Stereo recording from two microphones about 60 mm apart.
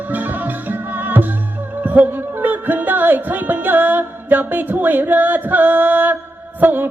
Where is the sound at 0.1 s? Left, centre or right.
Right.